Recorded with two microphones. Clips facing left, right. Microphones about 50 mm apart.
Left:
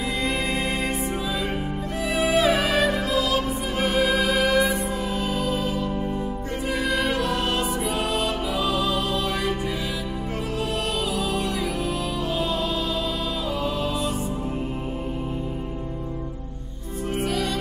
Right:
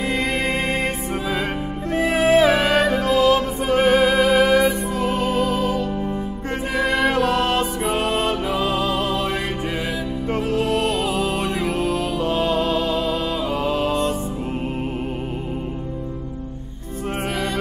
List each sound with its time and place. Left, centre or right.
2.0 s music: right
5.0 s music: right
6.8 s music: right
10.5 s music: right